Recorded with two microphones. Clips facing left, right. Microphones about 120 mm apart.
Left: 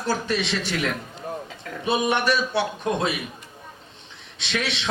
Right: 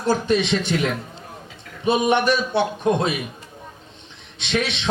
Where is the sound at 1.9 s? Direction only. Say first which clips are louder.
Right 4 dB; 20° right (ahead or behind).